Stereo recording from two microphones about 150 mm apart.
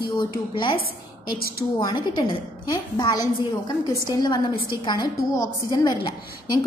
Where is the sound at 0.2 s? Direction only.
30° left (ahead or behind).